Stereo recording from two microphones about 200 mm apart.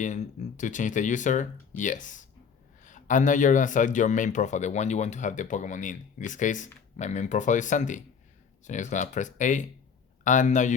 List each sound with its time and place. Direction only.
0.0 s speech: 35° left (ahead or behind)